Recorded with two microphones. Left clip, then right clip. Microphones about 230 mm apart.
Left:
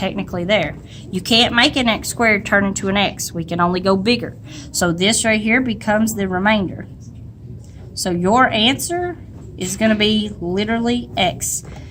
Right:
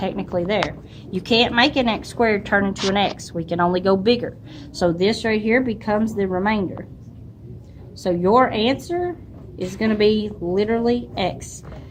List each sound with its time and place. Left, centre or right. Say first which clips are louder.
0.0 s a woman's voice: even; left
8.0 s a woman's voice: left 1 dB; left